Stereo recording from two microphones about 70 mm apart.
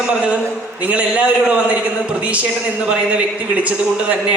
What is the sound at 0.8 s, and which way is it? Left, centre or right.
A man's voice, centre.